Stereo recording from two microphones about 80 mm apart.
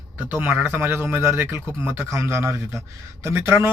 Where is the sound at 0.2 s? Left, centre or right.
Right.